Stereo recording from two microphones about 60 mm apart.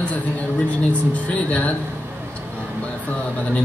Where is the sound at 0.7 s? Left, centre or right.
Left.